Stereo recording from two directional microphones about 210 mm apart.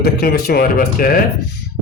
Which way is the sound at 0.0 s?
45° left (ahead or behind).